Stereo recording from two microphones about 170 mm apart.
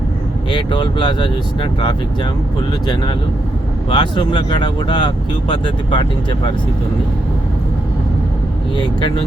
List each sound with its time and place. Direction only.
0.5 s speech: 25° left (ahead or behind)
3.8 s speech: 30° left (ahead or behind)